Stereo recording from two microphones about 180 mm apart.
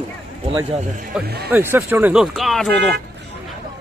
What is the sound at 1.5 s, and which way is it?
Speech, 10° right (ahead or behind).